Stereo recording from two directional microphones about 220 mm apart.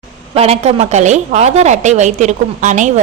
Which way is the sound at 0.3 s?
25° right (ahead or behind).